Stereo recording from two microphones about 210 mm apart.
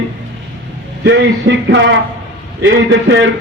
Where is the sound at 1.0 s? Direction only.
55° right (ahead or behind).